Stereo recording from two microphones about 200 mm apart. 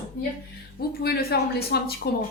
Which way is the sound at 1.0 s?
50° left (ahead or behind).